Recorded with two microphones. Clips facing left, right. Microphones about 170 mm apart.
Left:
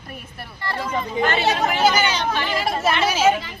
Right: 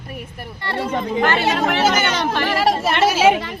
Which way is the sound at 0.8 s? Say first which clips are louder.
Right 3 dB; 65° right (ahead or behind).